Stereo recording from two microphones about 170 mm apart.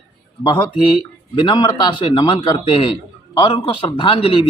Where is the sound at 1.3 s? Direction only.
25° left (ahead or behind).